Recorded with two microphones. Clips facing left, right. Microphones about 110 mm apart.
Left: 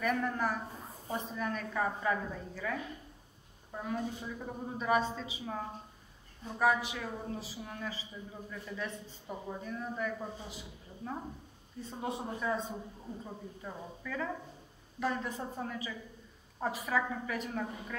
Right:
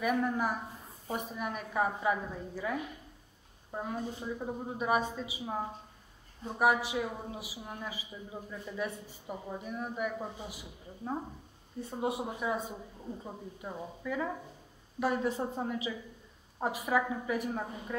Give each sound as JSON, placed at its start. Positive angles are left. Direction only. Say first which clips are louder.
{"t": 0.0, "sound": "speech", "louder": "right 2 dB", "side_deg": -10}